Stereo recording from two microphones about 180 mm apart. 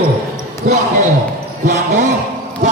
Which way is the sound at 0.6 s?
45° right (ahead or behind).